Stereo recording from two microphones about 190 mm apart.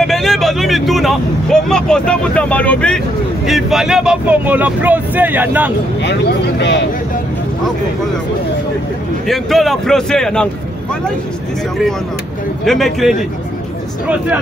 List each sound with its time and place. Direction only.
0.0 s speech: centre (ahead or behind)
6.0 s speech: 60° left (ahead or behind)
9.3 s speech: centre (ahead or behind)
12.6 s speech: centre (ahead or behind)